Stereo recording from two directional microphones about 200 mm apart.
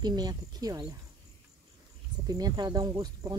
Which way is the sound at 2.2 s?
20° right (ahead or behind).